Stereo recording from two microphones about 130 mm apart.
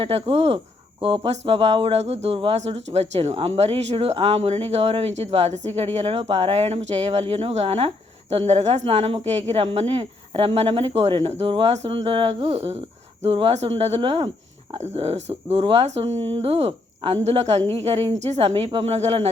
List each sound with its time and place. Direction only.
0.0 s speech: 45° right (ahead or behind)